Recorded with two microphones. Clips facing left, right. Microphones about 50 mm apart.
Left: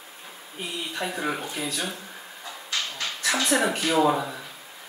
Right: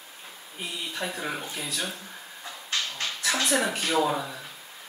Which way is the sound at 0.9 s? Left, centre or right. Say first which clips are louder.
Left 4 dB; centre.